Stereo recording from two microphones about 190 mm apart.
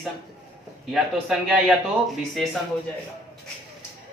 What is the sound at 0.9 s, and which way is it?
Speech, centre (ahead or behind).